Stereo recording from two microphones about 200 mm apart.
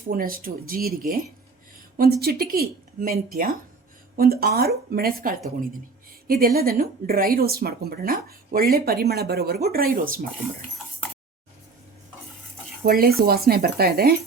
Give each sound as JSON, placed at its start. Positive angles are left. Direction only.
{"t": 0.1, "sound": "a woman's voice", "side_deg": -45}
{"t": 12.8, "sound": "a woman's voice", "side_deg": -50}